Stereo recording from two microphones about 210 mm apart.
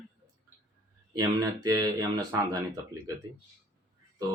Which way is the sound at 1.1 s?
15° right (ahead or behind).